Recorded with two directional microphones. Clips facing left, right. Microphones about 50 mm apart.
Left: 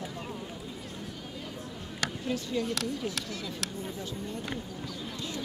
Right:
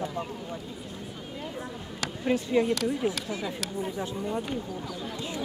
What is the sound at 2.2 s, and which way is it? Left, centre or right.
Speech, right.